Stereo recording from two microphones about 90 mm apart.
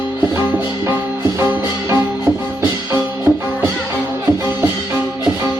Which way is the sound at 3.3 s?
40° right (ahead or behind).